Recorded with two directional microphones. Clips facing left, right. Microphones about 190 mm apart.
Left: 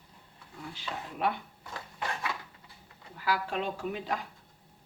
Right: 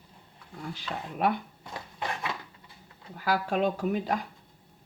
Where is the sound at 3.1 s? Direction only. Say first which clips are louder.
Right 4 dB; 45° right (ahead or behind).